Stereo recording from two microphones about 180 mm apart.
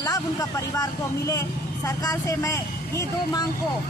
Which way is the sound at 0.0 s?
20° left (ahead or behind).